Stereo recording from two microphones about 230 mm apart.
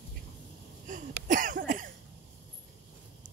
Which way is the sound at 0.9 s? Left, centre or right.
Right.